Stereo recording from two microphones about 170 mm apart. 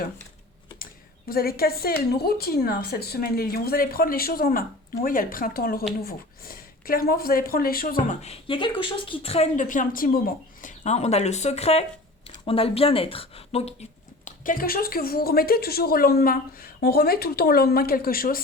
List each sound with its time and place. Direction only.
1.3 s a woman's voice: 60° left (ahead or behind)
8.2 s a woman's voice: 35° left (ahead or behind)
14.3 s a woman's voice: 55° left (ahead or behind)